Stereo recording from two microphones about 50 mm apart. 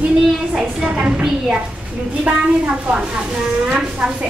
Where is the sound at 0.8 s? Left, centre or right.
Right.